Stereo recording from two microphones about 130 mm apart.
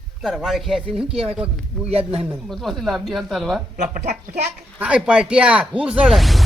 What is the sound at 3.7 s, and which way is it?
Speech, 90° right.